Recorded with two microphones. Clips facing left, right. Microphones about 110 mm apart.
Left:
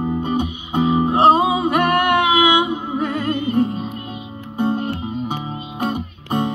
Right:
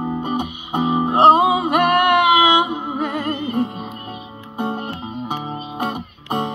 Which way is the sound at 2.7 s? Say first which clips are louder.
Left 1 dB; 20° right (ahead or behind).